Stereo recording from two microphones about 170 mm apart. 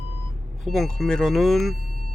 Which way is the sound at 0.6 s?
Centre (ahead or behind).